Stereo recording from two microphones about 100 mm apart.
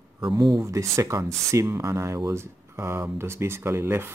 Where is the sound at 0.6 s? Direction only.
30° right (ahead or behind).